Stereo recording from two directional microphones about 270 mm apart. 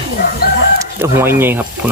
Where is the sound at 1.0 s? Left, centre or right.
Centre.